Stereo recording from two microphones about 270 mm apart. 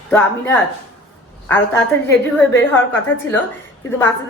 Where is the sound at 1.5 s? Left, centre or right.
Centre.